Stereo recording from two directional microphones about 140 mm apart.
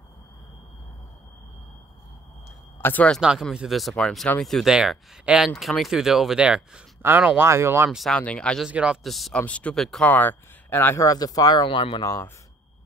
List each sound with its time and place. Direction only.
2.8 s speech: 10° left (ahead or behind)
3.2 s speech: 5° right (ahead or behind)
7.9 s speech: centre (ahead or behind)
8.6 s speech: 5° right (ahead or behind); by 12.1 s 35° left (ahead or behind)